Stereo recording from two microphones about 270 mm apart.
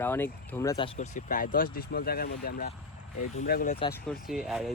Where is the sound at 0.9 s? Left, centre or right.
Left.